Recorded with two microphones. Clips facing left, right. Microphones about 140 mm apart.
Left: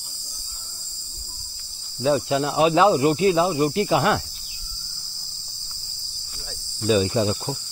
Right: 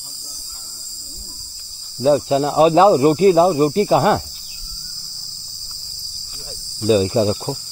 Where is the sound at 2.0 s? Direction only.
30° right (ahead or behind).